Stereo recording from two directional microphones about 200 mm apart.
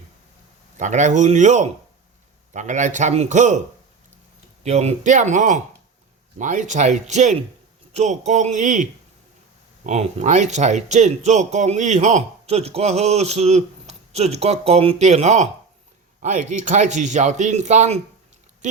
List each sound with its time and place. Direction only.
0.8 s speech: 35° right (ahead or behind)
4.6 s speech: 35° right (ahead or behind)